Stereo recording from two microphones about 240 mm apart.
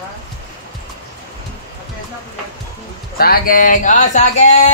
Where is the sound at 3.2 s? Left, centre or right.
Left.